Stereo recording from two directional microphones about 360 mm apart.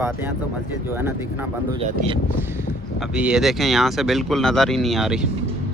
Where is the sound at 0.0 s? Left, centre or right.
Centre.